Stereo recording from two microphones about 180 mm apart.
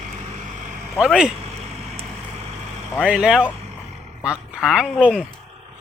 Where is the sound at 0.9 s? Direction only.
Centre (ahead or behind).